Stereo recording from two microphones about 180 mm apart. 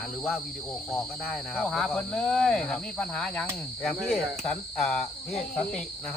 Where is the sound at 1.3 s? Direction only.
Centre (ahead or behind).